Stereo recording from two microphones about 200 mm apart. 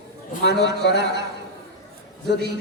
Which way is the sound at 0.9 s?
55° right (ahead or behind).